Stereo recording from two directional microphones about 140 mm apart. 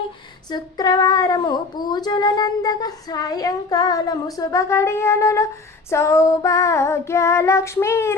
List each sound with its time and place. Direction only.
0.5 s female singing: 30° left (ahead or behind)